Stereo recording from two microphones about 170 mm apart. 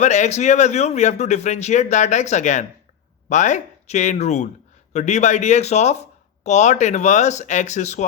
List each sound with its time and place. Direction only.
0.0 s speech: 40° left (ahead or behind)